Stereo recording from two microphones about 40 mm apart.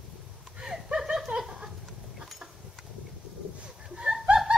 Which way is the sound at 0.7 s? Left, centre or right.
Centre.